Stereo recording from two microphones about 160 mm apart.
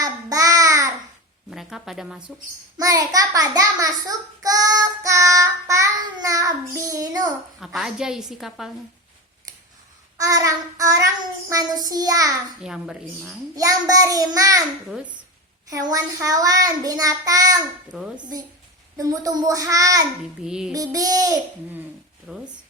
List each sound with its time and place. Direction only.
0.0 s babbling: 20° right (ahead or behind)
1.5 s a woman's voice: centre (ahead or behind)
2.7 s child singing: 25° right (ahead or behind)
7.6 s a woman's voice: centre (ahead or behind)
9.5 s a sound: 25° right (ahead or behind)
10.2 s child singing: 20° right (ahead or behind)
12.6 s a woman's voice: 5° right (ahead or behind)
13.6 s child singing: 20° right (ahead or behind)
15.7 s child singing: 20° right (ahead or behind)
20.4 s a woman's voice: 5° right (ahead or behind)
20.7 s child singing: 20° right (ahead or behind)
22.3 s a woman's voice: centre (ahead or behind)